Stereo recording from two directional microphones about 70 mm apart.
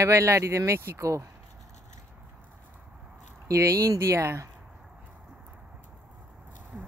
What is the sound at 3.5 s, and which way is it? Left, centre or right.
Speech, right.